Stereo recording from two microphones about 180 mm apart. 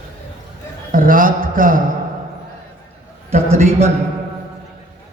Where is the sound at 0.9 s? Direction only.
50° right (ahead or behind).